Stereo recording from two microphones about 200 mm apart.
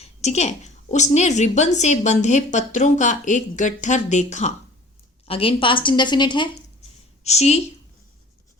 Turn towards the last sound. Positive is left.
turn(degrees=35)  # may be behind; listen again after turning